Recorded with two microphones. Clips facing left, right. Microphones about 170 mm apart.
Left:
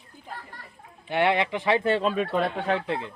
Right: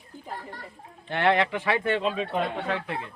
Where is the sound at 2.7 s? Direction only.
30° left (ahead or behind).